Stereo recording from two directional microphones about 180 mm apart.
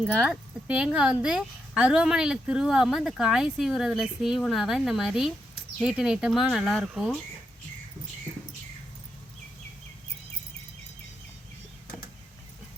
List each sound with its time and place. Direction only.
0.0 s speech: 5° right (ahead or behind)